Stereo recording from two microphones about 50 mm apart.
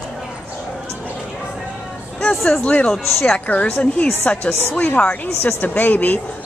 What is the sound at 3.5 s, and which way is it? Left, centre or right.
Speech, left.